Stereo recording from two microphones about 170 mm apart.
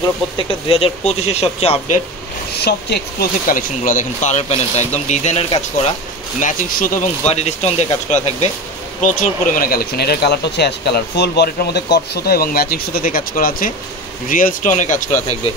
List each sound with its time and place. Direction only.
0.4 s speech: 35° left (ahead or behind)
2.5 s speech: 75° left (ahead or behind); by 5.4 s 45° left (ahead or behind)
6.4 s speech: 50° left (ahead or behind)
9.0 s speech: 50° left (ahead or behind)